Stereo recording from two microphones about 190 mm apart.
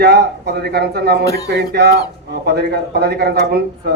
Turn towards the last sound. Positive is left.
turn(degrees=-55)  # may be behind; listen again after turning